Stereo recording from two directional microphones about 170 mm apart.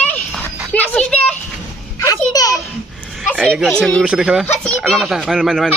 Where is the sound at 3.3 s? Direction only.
5° right (ahead or behind).